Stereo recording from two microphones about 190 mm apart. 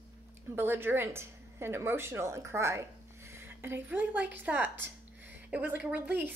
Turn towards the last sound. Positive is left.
turn(degrees=-10)  # may be behind; listen again after turning